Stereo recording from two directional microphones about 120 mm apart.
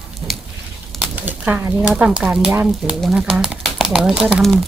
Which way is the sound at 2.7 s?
Centre (ahead or behind).